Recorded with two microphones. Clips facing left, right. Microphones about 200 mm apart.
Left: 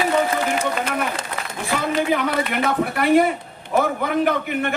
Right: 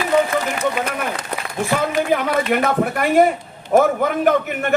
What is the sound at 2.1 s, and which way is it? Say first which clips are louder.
A man's voice: right 3 dB; 45° right (ahead or behind).